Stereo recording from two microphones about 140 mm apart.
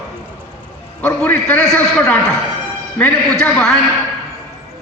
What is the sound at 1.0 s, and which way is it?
A man's voice, 10° left (ahead or behind).